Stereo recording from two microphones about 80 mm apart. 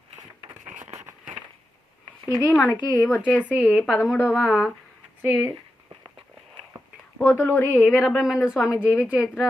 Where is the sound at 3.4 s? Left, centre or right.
Centre.